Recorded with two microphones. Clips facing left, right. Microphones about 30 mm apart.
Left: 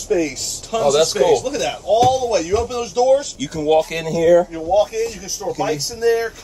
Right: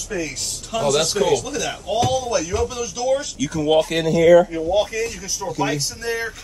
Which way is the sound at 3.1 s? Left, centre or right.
Left.